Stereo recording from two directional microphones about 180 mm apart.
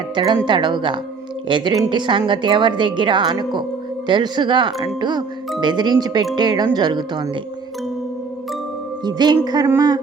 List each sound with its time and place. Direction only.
0.2 s a woman's voice: 25° right (ahead or behind)
9.0 s a woman's voice: 25° right (ahead or behind)